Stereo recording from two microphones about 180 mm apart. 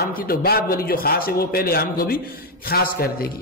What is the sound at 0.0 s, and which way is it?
A man's voice, 55° left (ahead or behind).